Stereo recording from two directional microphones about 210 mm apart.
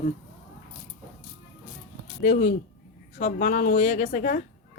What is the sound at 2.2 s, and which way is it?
A woman's voice, 40° left (ahead or behind).